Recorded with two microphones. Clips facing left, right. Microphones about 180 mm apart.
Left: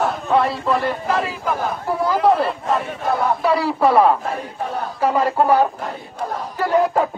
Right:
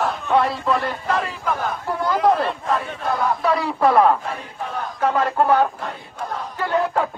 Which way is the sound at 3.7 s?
Centre (ahead or behind).